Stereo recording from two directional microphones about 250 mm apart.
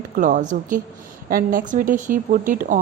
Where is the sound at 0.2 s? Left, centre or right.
Right.